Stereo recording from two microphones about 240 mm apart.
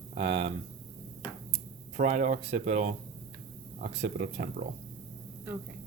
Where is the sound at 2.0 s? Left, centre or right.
Right.